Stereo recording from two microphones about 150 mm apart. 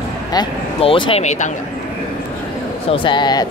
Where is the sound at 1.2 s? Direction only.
55° left (ahead or behind).